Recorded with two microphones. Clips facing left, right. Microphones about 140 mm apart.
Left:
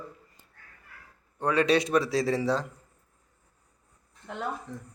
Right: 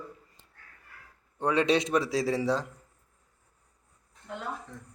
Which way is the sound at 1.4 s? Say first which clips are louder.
Left 1 dB; 20° right (ahead or behind).